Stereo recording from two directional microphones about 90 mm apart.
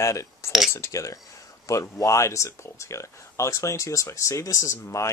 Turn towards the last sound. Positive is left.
turn(degrees=35)  # may be behind; listen again after turning